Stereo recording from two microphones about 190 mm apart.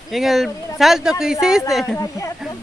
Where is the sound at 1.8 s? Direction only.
15° left (ahead or behind).